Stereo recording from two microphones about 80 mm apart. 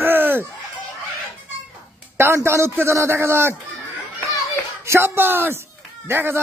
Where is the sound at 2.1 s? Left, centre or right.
Right.